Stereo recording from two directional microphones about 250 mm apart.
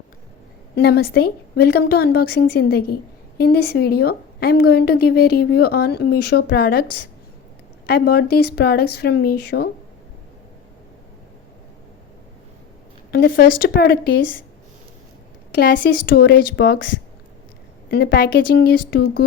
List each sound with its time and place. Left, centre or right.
0.8 s a woman's voice: left
13.1 s a woman's voice: left
15.5 s a woman's voice: left
17.9 s a woman's voice: left